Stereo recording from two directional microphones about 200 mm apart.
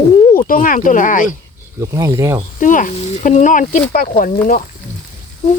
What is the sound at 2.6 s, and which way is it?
Speech, 40° left (ahead or behind).